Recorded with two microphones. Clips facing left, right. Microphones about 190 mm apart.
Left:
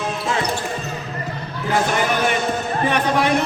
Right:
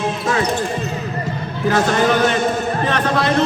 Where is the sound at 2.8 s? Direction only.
15° left (ahead or behind).